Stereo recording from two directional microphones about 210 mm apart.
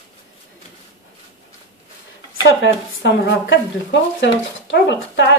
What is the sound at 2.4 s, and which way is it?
Speech, 60° left (ahead or behind).